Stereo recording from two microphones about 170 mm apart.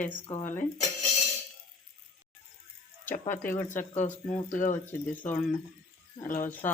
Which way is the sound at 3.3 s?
15° left (ahead or behind).